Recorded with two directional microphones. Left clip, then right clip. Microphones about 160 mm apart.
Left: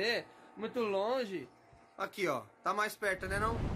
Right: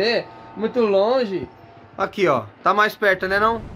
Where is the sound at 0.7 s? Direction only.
15° right (ahead or behind).